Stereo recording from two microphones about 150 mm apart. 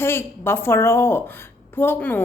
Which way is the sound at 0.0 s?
15° left (ahead or behind).